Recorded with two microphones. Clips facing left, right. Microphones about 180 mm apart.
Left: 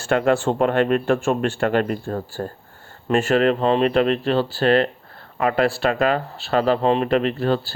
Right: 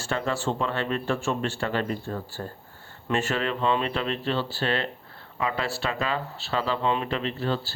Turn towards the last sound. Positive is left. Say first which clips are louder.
# left 8 dB
turn(degrees=55)  # may be behind; listen again after turning